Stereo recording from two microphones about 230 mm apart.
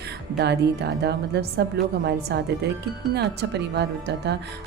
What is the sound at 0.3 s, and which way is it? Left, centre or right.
A woman's voice, right.